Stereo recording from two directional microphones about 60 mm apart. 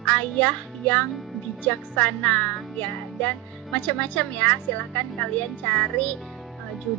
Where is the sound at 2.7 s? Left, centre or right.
Left.